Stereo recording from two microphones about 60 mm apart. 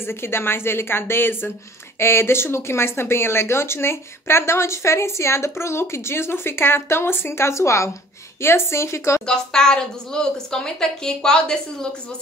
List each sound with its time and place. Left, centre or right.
0.0 s a woman's voice: left
9.2 s a woman's voice: centre